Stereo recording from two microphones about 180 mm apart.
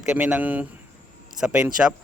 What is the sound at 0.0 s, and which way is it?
Speech, 5° right (ahead or behind).